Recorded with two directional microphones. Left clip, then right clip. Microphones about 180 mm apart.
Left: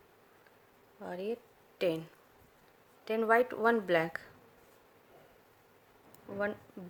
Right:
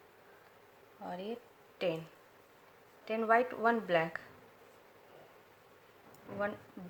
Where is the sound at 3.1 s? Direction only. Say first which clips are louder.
Left 2 dB; 55° left (ahead or behind).